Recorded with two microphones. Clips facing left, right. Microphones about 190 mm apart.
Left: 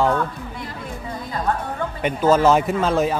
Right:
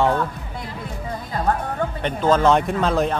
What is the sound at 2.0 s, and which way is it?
Speech, 5° left (ahead or behind).